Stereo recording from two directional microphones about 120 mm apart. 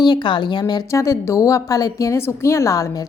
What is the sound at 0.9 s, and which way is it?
A woman's voice, 25° left (ahead or behind).